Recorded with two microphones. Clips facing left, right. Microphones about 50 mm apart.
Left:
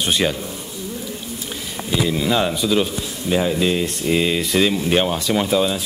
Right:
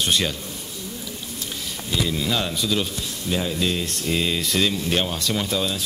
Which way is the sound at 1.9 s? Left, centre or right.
Centre.